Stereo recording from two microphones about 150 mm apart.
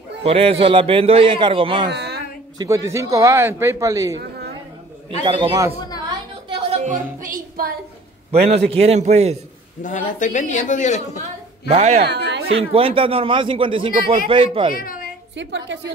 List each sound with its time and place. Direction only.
0.2 s speech: 40° right (ahead or behind)
1.9 s a sound: 90° right
2.6 s a man's voice: 20° right (ahead or behind)
5.2 s speech: 35° right (ahead or behind)
6.7 s music: 55° right (ahead or behind); by 7.7 s 70° right (ahead or behind)
8.3 s a man's voice: 45° right (ahead or behind)
9.8 s a man's voice: 55° left (ahead or behind)
11.7 s a man's voice: 45° right (ahead or behind)
12.0 s speech: 90° right
12.7 s speech: 35° right (ahead or behind)
14.7 s speech: 70° left (ahead or behind)